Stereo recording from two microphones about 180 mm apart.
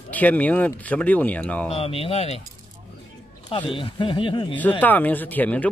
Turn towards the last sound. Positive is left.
turn(degrees=10)  # may be behind; listen again after turning